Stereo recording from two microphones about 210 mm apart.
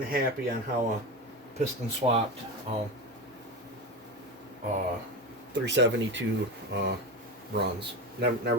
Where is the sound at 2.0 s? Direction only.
20° right (ahead or behind).